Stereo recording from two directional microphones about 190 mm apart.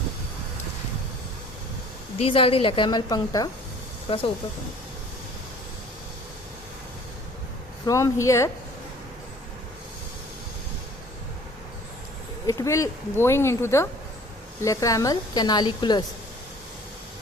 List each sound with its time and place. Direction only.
2.1 s a woman's voice: 30° left (ahead or behind)
7.9 s speech: 15° left (ahead or behind)
12.5 s a woman's voice: 15° left (ahead or behind)